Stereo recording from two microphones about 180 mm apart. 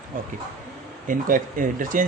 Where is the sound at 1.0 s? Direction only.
50° right (ahead or behind).